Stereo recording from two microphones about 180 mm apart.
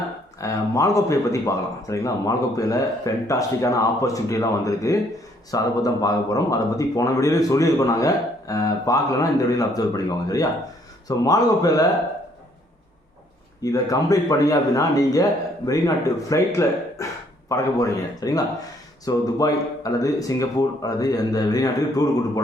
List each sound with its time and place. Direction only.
0.3 s speech: 20° left (ahead or behind)
10.2 s speech: 20° left (ahead or behind)
13.6 s speech: 20° left (ahead or behind)